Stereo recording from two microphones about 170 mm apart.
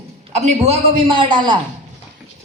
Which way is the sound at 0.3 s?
40° right (ahead or behind).